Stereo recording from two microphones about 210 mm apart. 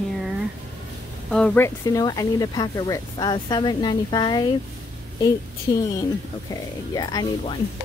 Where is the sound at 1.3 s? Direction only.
5° left (ahead or behind).